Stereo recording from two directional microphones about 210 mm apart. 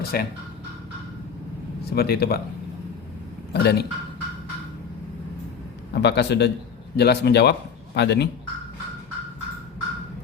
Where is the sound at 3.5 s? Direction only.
50° left (ahead or behind).